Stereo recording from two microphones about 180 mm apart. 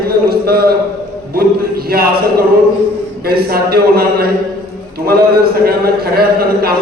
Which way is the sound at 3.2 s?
60° right (ahead or behind).